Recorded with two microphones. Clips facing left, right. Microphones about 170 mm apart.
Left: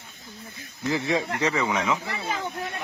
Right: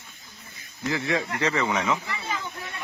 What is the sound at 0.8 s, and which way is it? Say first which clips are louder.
A man's voice: left 1 dB; 20° left (ahead or behind).